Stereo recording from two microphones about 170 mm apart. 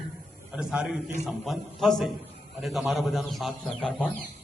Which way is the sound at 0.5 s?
5° right (ahead or behind).